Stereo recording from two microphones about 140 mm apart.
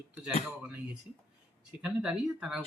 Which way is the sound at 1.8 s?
5° right (ahead or behind).